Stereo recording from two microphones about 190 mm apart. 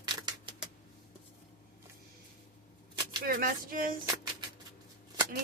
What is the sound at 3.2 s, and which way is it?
Speech, 50° right (ahead or behind).